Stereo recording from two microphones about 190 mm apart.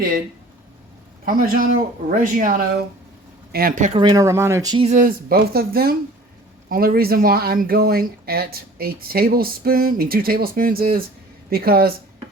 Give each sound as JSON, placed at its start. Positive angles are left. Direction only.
{"t": 1.2, "sound": "a man's voice", "side_deg": -45}
{"t": 3.9, "sound": "speech", "side_deg": -20}
{"t": 4.9, "sound": "speech", "side_deg": -45}